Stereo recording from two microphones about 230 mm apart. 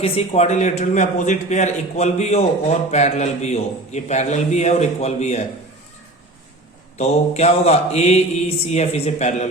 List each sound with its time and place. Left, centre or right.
0.0 s a man's voice: left
7.0 s a man's voice: left